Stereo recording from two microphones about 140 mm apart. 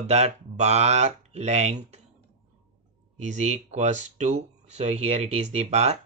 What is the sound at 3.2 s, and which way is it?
Speech, 55° right (ahead or behind).